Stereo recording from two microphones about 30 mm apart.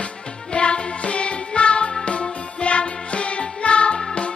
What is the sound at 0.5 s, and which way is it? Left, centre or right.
Music, left.